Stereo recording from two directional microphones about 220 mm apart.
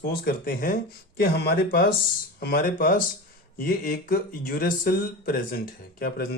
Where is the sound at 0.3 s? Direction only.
40° left (ahead or behind).